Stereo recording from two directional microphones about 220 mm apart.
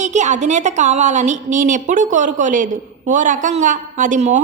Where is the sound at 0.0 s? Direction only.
30° right (ahead or behind).